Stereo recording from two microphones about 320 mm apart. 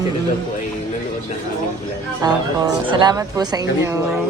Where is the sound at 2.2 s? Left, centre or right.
Centre.